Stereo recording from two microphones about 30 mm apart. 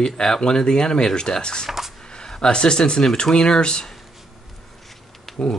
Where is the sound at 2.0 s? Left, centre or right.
Left.